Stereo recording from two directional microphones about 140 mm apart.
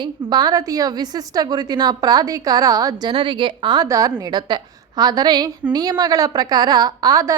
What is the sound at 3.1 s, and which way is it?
A woman's voice, 35° right (ahead or behind).